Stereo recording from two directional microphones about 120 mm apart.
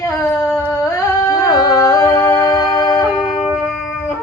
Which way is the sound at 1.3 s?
35° left (ahead or behind).